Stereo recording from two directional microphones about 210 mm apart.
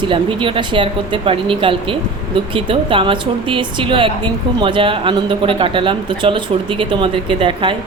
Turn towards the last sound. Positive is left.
turn(degrees=-25)  # may be behind; listen again after turning